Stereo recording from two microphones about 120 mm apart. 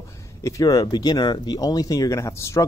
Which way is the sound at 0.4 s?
30° left (ahead or behind).